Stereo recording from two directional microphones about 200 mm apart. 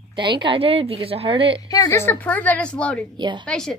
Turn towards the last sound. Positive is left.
turn(degrees=5)  # may be behind; listen again after turning